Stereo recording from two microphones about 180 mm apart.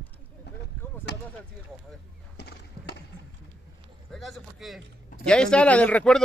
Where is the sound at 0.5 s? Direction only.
70° left (ahead or behind).